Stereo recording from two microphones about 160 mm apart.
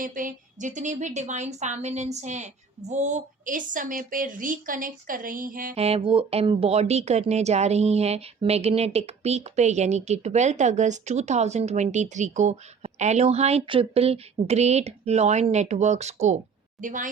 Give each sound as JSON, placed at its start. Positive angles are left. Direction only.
{"t": 0.0, "sound": "a woman's voice", "side_deg": -55}
{"t": 5.7, "sound": "a woman's voice", "side_deg": -40}